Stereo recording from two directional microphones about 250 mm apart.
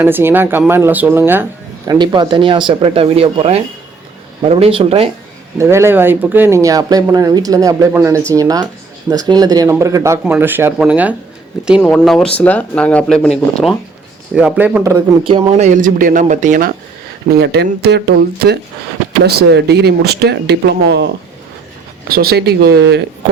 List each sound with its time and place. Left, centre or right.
0.0 s speech: centre
5.5 s speech: centre
14.3 s speech: centre
15.3 s speech: right
22.1 s speech: right